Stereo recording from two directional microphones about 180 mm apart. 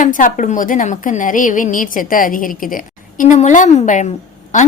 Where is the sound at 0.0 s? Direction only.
45° left (ahead or behind).